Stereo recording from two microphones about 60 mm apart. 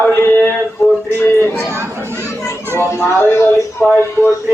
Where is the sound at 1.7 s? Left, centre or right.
Right.